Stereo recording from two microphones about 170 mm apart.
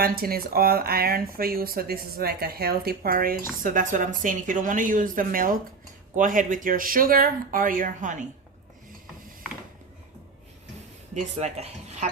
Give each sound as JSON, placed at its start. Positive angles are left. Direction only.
{"t": 0.0, "sound": "speech", "side_deg": -60}
{"t": 11.1, "sound": "speech", "side_deg": -40}